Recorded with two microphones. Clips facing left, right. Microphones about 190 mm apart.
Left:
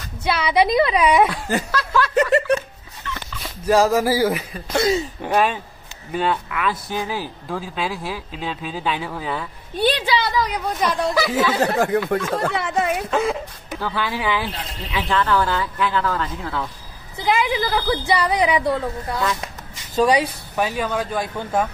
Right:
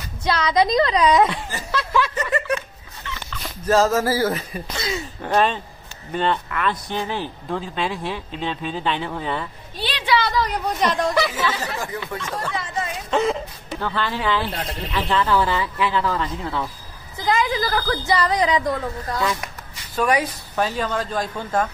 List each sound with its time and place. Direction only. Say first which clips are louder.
0.2 s a woman's voice: left 1 dB; 10° left (ahead or behind)
1.7 s speech: left 1 dB; 5° right (ahead or behind)
3.4 s a woman's voice: left 1 dB; 10° left (ahead or behind)
11.5 s speech: left 10 dB; 60° left (ahead or behind)
13.1 s speech: even; centre (ahead or behind)
17.2 s a woman's voice: left 1 dB; 10° left (ahead or behind)